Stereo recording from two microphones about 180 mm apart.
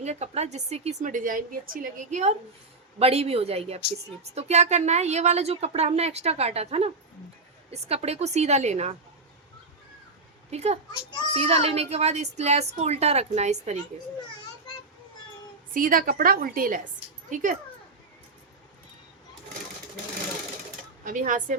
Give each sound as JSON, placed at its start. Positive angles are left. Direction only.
{"t": 0.0, "sound": "speech", "side_deg": -40}
{"t": 10.5, "sound": "speech", "side_deg": -40}
{"t": 15.7, "sound": "a woman's voice", "side_deg": -50}
{"t": 21.0, "sound": "a woman's voice", "side_deg": -45}